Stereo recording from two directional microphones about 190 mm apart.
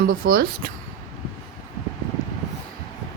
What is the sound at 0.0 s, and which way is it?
Speech, 50° right (ahead or behind).